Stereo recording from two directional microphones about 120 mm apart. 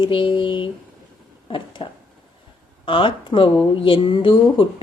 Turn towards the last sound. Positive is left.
turn(degrees=40)  # may be behind; listen again after turning